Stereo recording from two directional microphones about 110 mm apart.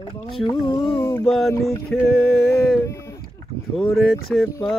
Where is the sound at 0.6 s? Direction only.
25° left (ahead or behind).